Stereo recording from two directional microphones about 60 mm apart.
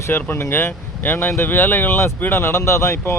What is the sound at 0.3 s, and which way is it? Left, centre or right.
Speech, left.